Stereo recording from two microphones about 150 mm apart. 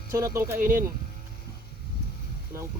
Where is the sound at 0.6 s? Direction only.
70° right (ahead or behind).